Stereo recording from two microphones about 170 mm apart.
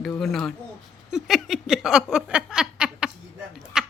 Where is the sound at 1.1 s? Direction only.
Centre (ahead or behind).